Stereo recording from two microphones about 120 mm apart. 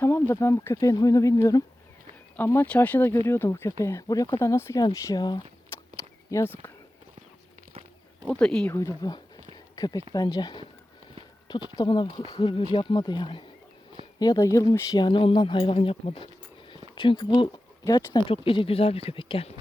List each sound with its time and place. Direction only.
0.0 s speech: 20° left (ahead or behind)
2.3 s speech: 15° left (ahead or behind); by 5.4 s 35° left (ahead or behind)
6.3 s speech: 20° left (ahead or behind)
8.3 s speech: 5° left (ahead or behind)
8.7 s speech: 30° left (ahead or behind)
14.2 s speech: 30° left (ahead or behind); by 19.5 s 50° left (ahead or behind)